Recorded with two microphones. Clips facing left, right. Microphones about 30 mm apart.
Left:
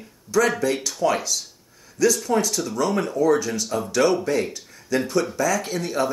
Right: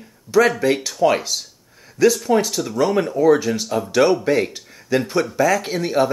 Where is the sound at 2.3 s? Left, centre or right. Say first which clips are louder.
Right 4 dB; centre.